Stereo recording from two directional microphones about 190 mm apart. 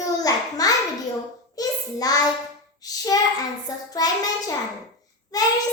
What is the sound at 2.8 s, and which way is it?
A child's voice, 20° left (ahead or behind).